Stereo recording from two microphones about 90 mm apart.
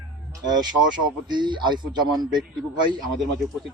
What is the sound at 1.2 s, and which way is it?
A man's voice, 55° right (ahead or behind).